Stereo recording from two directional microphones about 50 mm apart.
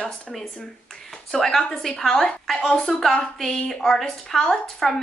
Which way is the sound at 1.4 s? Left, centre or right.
Centre.